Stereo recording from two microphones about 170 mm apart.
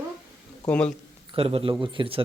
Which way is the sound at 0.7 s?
5° left (ahead or behind).